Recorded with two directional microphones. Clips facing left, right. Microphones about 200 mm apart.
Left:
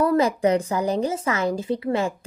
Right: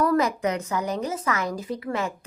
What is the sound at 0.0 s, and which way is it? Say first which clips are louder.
A woman's voice: left 3 dB; 30° left (ahead or behind).